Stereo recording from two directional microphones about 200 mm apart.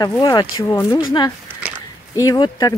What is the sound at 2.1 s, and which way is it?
Speech, 20° left (ahead or behind).